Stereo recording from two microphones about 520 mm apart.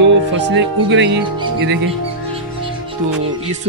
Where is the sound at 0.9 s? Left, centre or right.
Right.